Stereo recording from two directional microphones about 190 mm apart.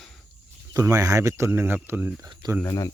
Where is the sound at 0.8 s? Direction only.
15° right (ahead or behind).